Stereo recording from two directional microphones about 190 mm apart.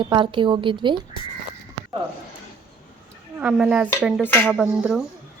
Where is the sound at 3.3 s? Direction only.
5° right (ahead or behind).